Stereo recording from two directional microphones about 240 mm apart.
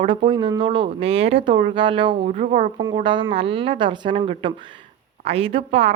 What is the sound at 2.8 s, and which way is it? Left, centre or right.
A woman's voice, centre.